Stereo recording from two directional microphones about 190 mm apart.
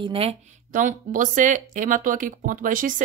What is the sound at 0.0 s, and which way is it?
Speech, 30° right (ahead or behind).